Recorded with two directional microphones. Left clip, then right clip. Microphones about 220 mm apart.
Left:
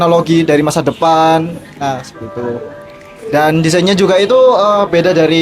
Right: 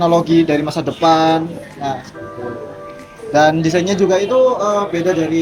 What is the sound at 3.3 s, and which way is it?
Speech, 40° left (ahead or behind).